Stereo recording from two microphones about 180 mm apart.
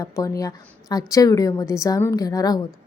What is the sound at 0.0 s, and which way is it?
A woman's voice, 20° left (ahead or behind).